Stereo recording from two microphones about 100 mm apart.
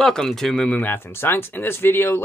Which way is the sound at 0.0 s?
5° left (ahead or behind).